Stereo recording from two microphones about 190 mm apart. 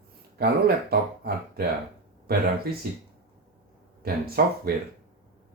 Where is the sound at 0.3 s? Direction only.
55° right (ahead or behind).